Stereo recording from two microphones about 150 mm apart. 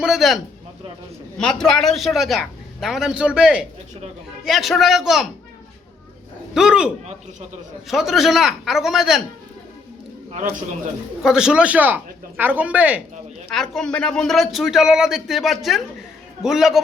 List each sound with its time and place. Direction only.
0.0 s speech: centre (ahead or behind)
6.5 s a man's voice: 5° right (ahead or behind)
10.3 s a man's voice: 55° right (ahead or behind)
11.2 s speech: 5° right (ahead or behind)
13.5 s speech: 5° left (ahead or behind)